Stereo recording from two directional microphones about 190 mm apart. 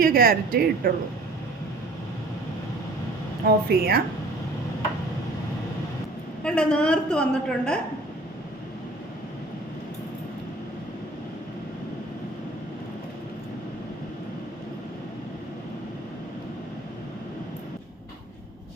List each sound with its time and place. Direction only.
0.0 s speech: 50° right (ahead or behind)
3.7 s speech: 50° right (ahead or behind)
6.4 s a woman's voice: 5° left (ahead or behind)